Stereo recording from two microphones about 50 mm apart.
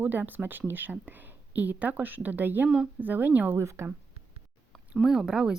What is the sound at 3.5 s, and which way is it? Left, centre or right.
Speech, right.